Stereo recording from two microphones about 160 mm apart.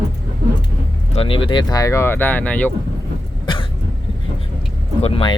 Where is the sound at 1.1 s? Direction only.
35° left (ahead or behind); by 2.7 s 10° left (ahead or behind).